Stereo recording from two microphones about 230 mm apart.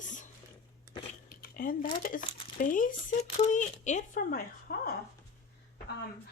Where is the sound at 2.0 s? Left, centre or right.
Left.